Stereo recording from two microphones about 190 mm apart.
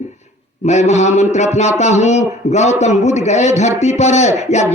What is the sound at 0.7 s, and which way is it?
Speech, 35° left (ahead or behind).